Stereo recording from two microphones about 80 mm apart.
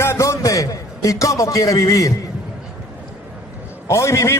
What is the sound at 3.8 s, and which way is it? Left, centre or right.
Speech, left.